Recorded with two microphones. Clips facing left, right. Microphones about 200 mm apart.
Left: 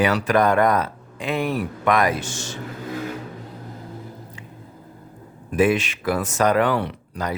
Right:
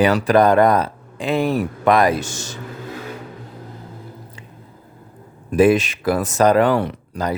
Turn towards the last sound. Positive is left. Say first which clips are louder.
# right 4 dB
turn(degrees=-40)  # may be behind; listen again after turning